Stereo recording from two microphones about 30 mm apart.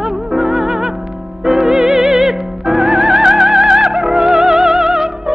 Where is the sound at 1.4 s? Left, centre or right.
Centre.